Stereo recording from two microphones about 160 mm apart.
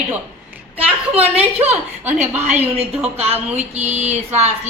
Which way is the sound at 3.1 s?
40° right (ahead or behind).